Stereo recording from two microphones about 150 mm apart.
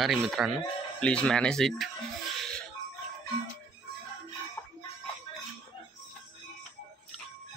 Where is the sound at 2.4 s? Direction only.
5° left (ahead or behind).